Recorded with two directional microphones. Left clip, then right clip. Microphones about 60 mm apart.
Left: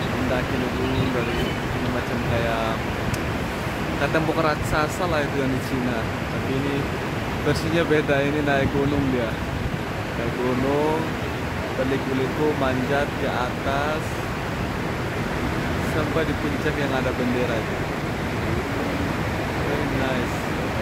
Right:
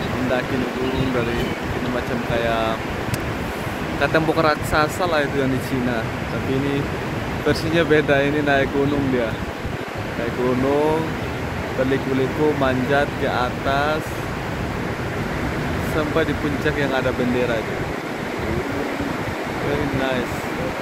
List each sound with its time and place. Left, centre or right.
4.0 s speech: right
7.4 s speech: right
12.6 s speech: right